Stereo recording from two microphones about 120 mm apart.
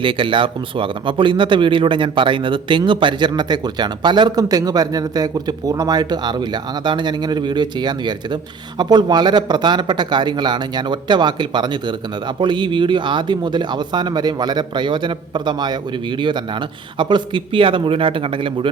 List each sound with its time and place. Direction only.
0.0 s speech: 45° right (ahead or behind)